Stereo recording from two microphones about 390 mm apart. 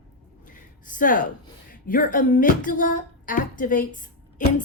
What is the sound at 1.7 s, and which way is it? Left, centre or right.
Speech, left.